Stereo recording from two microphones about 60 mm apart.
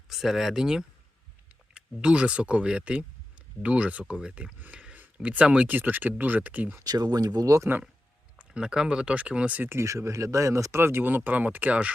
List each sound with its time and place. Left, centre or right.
0.1 s speech: centre; by 6.7 s right
6.8 s speech: right
8.4 s speech: centre
9.8 s speech: right
10.8 s speech: right